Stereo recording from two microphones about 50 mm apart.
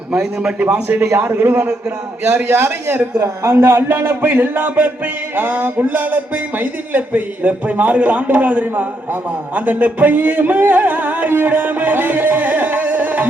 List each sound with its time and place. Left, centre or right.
0.6 s music: right
1.0 s a man's voice: right
1.3 s a man's voice: right
3.2 s a man's voice: right
5.4 s music: right